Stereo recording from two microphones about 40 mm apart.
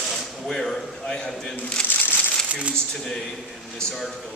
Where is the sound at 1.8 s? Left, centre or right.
Left.